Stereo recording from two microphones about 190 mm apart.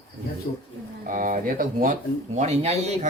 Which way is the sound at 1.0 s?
45° right (ahead or behind).